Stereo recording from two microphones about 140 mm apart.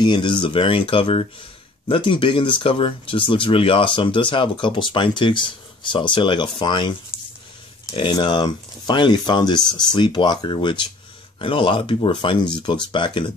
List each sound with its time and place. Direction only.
0.0 s speech: 35° left (ahead or behind)